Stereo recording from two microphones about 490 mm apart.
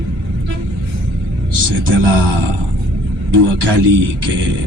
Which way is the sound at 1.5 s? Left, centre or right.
Right.